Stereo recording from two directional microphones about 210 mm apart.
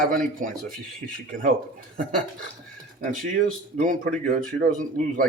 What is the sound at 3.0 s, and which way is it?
Speech, 40° right (ahead or behind).